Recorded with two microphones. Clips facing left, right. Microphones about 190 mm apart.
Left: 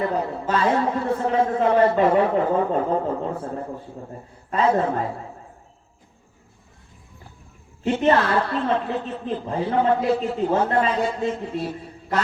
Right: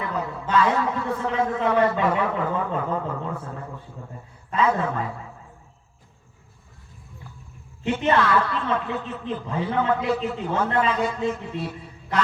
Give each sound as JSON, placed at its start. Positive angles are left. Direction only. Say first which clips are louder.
{"t": 0.0, "sound": "a man's voice", "louder": "left 5 dB", "side_deg": 35}
{"t": 7.9, "sound": "a man's voice", "louder": "left 2 dB", "side_deg": 35}